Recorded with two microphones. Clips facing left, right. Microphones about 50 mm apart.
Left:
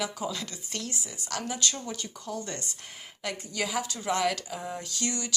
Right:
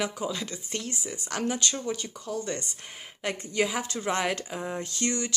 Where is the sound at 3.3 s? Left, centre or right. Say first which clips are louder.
Right 3 dB; right.